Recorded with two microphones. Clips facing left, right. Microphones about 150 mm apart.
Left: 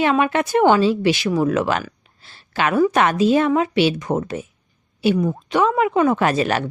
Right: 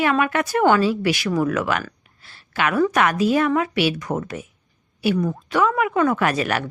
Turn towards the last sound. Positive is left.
turn(degrees=25)  # may be behind; listen again after turning